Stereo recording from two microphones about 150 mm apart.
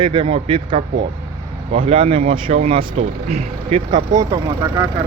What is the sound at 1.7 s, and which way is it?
Speech, 45° right (ahead or behind).